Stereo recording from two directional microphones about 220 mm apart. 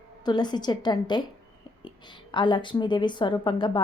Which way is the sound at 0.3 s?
20° left (ahead or behind).